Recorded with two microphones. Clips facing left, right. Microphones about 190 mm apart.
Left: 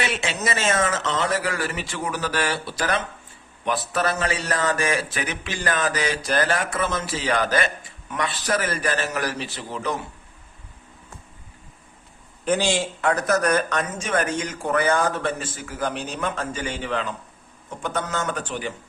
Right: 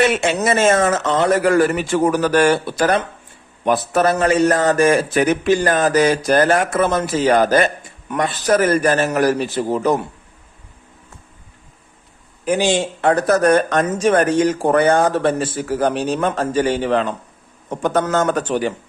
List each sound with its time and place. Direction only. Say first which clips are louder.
0.0 s speech: right 10 dB; 50° right (ahead or behind)
12.5 s speech: right 5 dB; 15° right (ahead or behind); by 16.6 s 35° right (ahead or behind)
16.6 s a man's voice: right 11 dB; 65° right (ahead or behind)
17.8 s speech: right 10 dB; 40° right (ahead or behind)
18.4 s speech: right 10 dB; 70° right (ahead or behind)